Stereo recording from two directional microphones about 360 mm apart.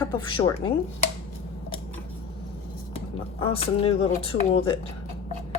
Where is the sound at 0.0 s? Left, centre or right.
Centre.